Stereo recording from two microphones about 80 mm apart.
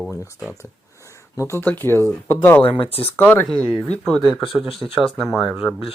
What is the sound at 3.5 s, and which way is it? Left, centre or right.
Speech, centre.